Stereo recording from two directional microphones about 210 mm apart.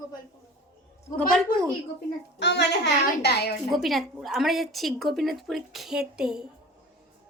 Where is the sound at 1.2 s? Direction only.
5° left (ahead or behind).